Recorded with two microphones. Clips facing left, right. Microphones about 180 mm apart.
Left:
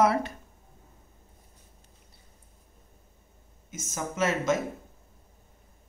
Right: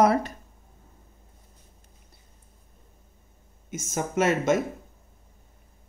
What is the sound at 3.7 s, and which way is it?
Speech, 55° right (ahead or behind).